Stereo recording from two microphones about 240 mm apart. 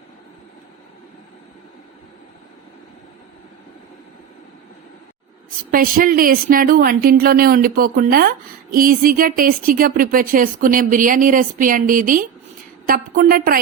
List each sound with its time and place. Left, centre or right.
5.7 s a woman's voice: right